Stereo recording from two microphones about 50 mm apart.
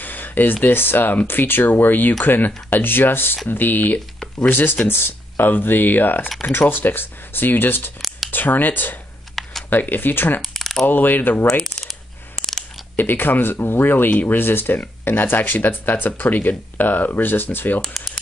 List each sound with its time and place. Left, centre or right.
0.0 s a sound: left
0.7 s speech: left
9.3 s computer keyboard: centre
9.7 s speech: left
10.4 s shuffling cards: centre
10.9 s speech: left
11.6 s coin: centre
12.9 s speech: left